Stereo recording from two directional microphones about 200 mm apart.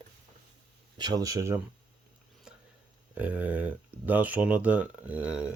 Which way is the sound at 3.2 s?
10° right (ahead or behind).